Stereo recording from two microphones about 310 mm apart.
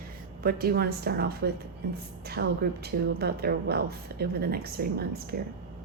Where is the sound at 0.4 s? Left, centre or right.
Right.